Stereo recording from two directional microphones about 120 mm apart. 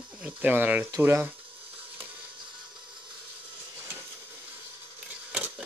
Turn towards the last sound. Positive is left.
turn(degrees=-10)  # may be behind; listen again after turning